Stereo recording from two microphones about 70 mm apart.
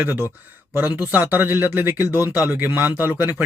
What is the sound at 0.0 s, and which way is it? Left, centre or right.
Speech, right.